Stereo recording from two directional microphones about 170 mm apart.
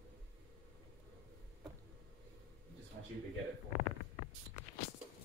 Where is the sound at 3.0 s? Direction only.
75° right (ahead or behind).